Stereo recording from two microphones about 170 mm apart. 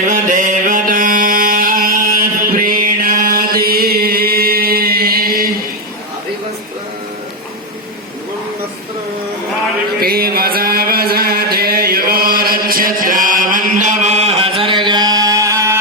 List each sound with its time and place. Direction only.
0.1 s music: 50° right (ahead or behind)
10.0 s music: 65° right (ahead or behind); by 15.8 s 20° right (ahead or behind)